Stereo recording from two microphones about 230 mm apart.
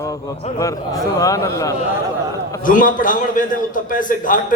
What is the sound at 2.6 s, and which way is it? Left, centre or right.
A man's voice, left.